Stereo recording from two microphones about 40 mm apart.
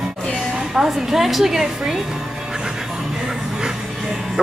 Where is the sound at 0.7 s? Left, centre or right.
Centre.